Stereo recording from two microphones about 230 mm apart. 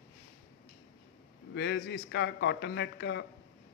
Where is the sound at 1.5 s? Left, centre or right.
Left.